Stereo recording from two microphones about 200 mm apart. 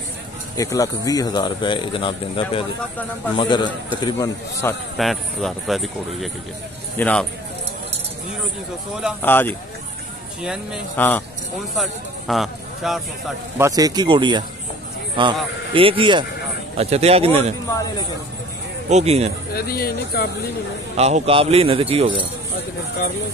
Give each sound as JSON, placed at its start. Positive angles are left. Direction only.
{"t": 0.6, "sound": "speech", "side_deg": 15}
{"t": 4.9, "sound": "speech", "side_deg": 0}
{"t": 9.2, "sound": "speech", "side_deg": 10}
{"t": 10.4, "sound": "speech", "side_deg": -5}
{"t": 11.0, "sound": "speech", "side_deg": 10}
{"t": 13.6, "sound": "a man's voice", "side_deg": -15}
{"t": 18.9, "sound": "a man's voice", "side_deg": -35}
{"t": 19.5, "sound": "speech", "side_deg": 50}
{"t": 20.9, "sound": "speech", "side_deg": -30}